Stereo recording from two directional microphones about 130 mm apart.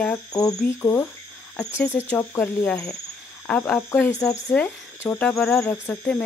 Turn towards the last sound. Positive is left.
turn(degrees=15)  # may be behind; listen again after turning